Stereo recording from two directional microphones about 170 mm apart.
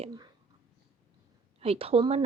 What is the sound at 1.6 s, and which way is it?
Speech, 35° right (ahead or behind).